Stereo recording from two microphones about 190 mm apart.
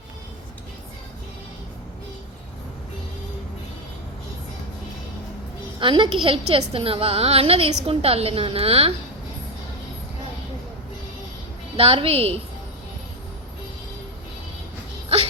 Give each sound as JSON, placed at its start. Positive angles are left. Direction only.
{"t": 5.8, "sound": "a woman's voice", "side_deg": -25}
{"t": 11.8, "sound": "a woman's voice", "side_deg": -30}